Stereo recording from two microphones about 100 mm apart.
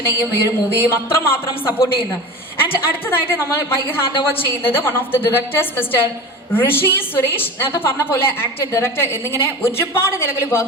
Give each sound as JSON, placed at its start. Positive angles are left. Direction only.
{"t": 0.1, "sound": "a woman's voice", "side_deg": 25}